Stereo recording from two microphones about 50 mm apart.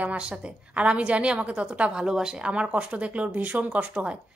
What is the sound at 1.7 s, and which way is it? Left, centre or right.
A woman's voice, centre.